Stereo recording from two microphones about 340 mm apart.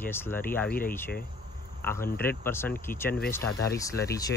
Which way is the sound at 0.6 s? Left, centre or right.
Left.